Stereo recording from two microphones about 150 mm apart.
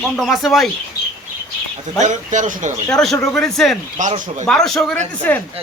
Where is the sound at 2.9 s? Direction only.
Centre (ahead or behind).